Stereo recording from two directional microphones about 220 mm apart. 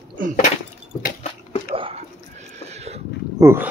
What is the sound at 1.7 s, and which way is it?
Whispering, 25° right (ahead or behind).